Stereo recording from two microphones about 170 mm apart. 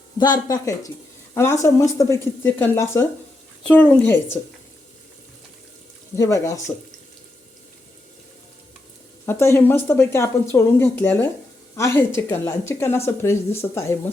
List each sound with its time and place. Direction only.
0.2 s speech: 25° left (ahead or behind)
6.1 s speech: 20° left (ahead or behind)
9.2 s speech: 15° left (ahead or behind)